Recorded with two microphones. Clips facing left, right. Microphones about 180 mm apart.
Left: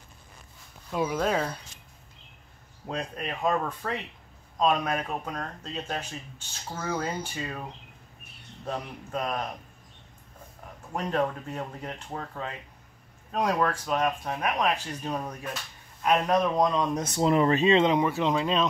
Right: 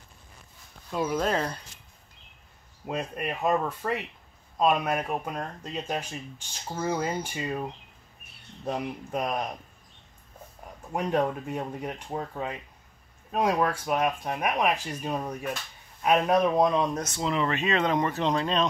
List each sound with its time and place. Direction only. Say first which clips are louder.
0.9 s speech: even; centre (ahead or behind)
2.9 s speech: right 2 dB; 5° right (ahead or behind)
8.6 s speech: right 3 dB; 15° right (ahead or behind)
10.9 s speech: right 2 dB; 10° right (ahead or behind)
17.0 s speech: left 5 dB; 40° left (ahead or behind)
17.9 s speech: left 1 dB; 10° left (ahead or behind)